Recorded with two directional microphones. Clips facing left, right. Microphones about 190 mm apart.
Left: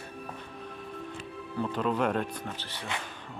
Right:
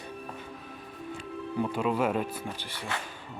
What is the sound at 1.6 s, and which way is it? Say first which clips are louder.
Speech: right 1 dB; 10° right (ahead or behind).